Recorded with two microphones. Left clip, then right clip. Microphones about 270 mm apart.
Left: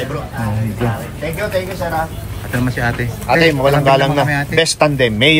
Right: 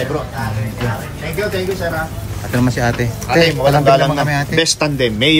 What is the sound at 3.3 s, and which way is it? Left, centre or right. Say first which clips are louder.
A man's voice: left 1 dB; left.